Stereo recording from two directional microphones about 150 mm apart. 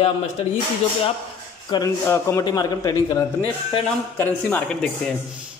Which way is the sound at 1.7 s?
30° left (ahead or behind).